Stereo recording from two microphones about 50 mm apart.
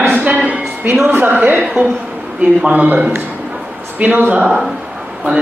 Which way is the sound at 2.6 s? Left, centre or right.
Right.